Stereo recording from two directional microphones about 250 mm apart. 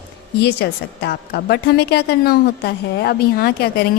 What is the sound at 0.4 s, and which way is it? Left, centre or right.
A woman's voice, left.